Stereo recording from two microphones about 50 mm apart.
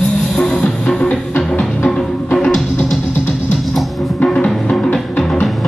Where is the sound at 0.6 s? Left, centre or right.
Centre.